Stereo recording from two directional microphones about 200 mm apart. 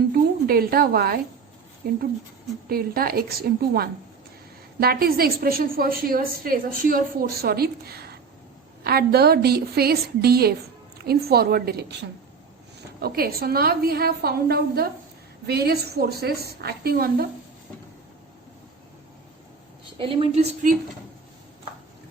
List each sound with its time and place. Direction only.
0.1 s a woman's voice: 50° right (ahead or behind)
2.6 s a woman's voice: 50° right (ahead or behind)
20.0 s a woman's voice: 25° right (ahead or behind)